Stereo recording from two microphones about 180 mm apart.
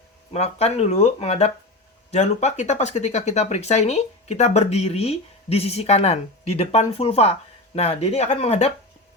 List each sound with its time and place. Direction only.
0.3 s speech: 35° left (ahead or behind)